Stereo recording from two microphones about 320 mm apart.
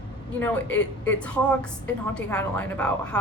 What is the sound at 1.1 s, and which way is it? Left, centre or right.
A woman's voice, centre.